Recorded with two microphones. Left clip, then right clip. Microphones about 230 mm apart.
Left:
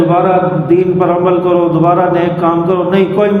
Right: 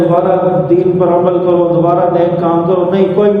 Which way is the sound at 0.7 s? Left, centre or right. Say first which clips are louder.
Left 2 dB; left.